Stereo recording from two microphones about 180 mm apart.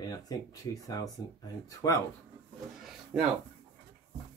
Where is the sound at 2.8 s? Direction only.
5° right (ahead or behind).